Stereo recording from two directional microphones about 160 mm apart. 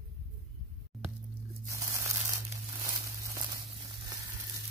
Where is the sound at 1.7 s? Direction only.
20° right (ahead or behind).